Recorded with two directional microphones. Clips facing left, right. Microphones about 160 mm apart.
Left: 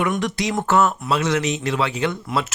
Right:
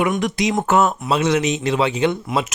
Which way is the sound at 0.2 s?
15° right (ahead or behind).